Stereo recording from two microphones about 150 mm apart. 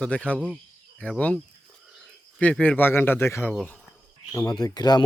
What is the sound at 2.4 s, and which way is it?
Speech, 10° left (ahead or behind).